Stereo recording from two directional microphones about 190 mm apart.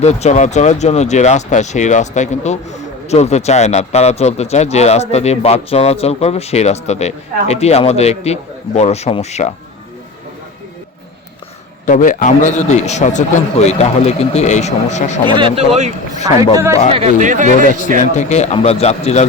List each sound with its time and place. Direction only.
0.0 s speech: 35° left (ahead or behind)
11.9 s speech: 40° left (ahead or behind)
15.3 s speech: 25° right (ahead or behind)
16.9 s speech: 35° right (ahead or behind)
18.2 s speech: 35° left (ahead or behind)